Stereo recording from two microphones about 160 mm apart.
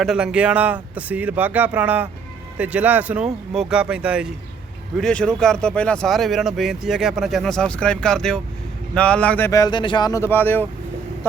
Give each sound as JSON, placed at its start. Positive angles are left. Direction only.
{"t": 0.0, "sound": "speech", "side_deg": -5}
{"t": 4.9, "sound": "speech", "side_deg": 5}
{"t": 9.5, "sound": "speech", "side_deg": 25}